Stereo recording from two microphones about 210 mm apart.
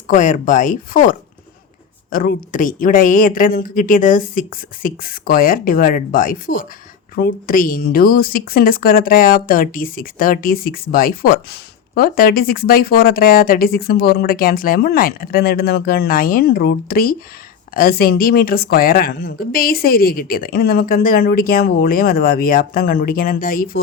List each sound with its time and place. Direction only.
0.1 s a woman's voice: 40° left (ahead or behind)